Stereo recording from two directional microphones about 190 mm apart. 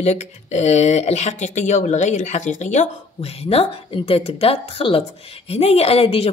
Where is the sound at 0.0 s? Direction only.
35° left (ahead or behind).